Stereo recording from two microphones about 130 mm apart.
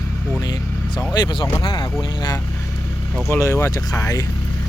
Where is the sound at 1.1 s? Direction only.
35° left (ahead or behind).